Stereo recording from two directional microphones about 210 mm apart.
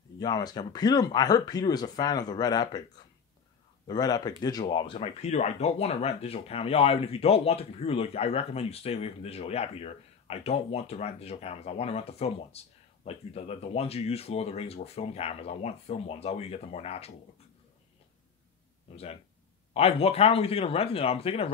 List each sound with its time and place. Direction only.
0.2 s speech: 20° left (ahead or behind)
3.8 s speech: 20° left (ahead or behind)
19.7 s speech: 30° left (ahead or behind)